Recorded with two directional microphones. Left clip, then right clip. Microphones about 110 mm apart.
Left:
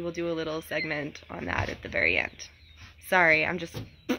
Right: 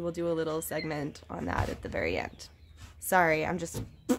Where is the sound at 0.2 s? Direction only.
35° right (ahead or behind).